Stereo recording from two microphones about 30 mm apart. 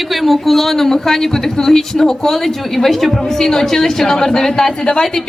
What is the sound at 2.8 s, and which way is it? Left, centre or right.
Speech, centre.